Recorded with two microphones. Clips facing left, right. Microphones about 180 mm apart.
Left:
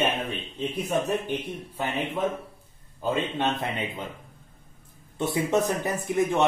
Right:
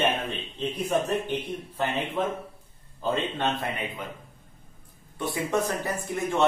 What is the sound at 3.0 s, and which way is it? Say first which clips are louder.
A man's voice: left 1 dB; 20° left (ahead or behind).